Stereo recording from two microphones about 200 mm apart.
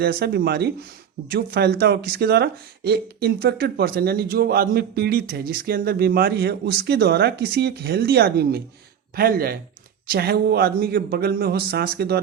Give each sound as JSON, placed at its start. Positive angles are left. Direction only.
{"t": 0.0, "sound": "speech", "side_deg": -50}